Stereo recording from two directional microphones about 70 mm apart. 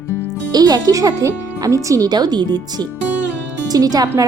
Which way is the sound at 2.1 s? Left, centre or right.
Right.